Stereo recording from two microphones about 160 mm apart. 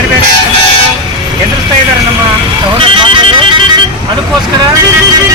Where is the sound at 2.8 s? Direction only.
30° right (ahead or behind).